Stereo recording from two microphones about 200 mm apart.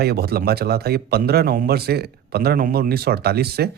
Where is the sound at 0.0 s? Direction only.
55° right (ahead or behind).